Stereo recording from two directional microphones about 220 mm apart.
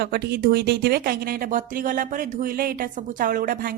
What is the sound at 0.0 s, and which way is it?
A woman's voice, 45° right (ahead or behind).